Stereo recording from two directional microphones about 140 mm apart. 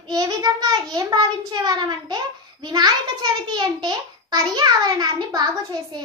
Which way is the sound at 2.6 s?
30° right (ahead or behind).